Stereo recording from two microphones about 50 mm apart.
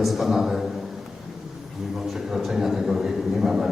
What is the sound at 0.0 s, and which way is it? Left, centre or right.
Speech, centre.